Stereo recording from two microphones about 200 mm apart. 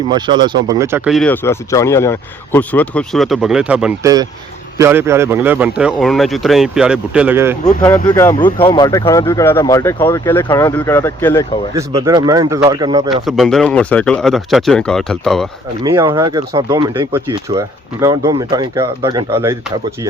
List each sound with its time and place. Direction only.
0.1 s speech: 20° right (ahead or behind)
1.1 s speech: 5° left (ahead or behind)
4.0 s speech: 20° right (ahead or behind)
8.0 s speech: 15° left (ahead or behind)
8.5 s speech: 25° left (ahead or behind)
11.7 s speech: 15° right (ahead or behind)
13.2 s speech: centre (ahead or behind)
15.8 s speech: 20° right (ahead or behind)